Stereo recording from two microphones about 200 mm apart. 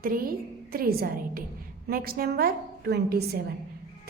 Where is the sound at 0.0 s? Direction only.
45° right (ahead or behind).